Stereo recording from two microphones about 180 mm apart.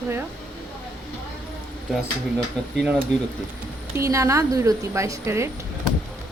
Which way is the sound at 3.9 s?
15° right (ahead or behind).